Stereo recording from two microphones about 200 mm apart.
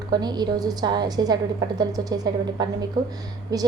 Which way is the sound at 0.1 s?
20° right (ahead or behind).